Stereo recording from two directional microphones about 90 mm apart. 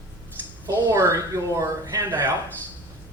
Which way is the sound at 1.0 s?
35° right (ahead or behind).